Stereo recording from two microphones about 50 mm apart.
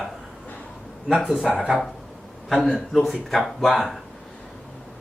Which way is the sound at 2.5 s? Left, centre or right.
Centre.